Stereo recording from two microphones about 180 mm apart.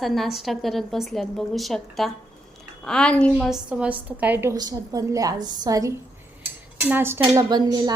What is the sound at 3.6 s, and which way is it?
A woman's voice, 5° right (ahead or behind).